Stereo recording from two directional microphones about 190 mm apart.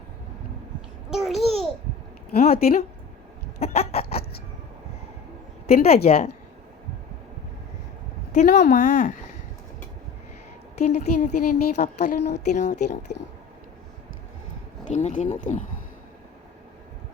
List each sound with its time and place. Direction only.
1.1 s babbling: centre (ahead or behind)
2.3 s speech: 55° left (ahead or behind)
3.6 s speech: 35° left (ahead or behind)
5.7 s speech: 35° left (ahead or behind)
8.3 s speech: 40° left (ahead or behind)
10.8 s speech: 40° left (ahead or behind)
14.8 s speech: 40° left (ahead or behind)